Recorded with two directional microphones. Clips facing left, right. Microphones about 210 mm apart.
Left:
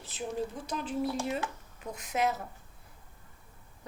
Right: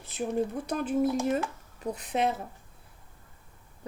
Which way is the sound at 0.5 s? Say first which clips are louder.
Right 6 dB; 55° right (ahead or behind).